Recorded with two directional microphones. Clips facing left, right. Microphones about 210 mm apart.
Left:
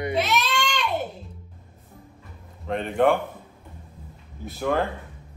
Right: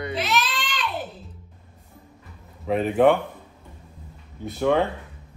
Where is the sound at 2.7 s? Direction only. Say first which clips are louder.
Right 3 dB; 5° right (ahead or behind).